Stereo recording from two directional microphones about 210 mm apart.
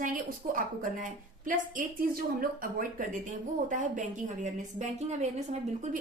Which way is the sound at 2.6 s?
40° right (ahead or behind).